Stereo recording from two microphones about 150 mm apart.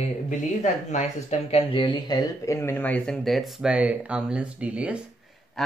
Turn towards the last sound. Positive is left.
turn(degrees=-10)  # may be behind; listen again after turning